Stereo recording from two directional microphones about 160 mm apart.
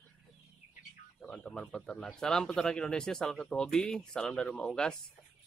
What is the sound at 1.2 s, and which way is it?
Speech, 5° left (ahead or behind).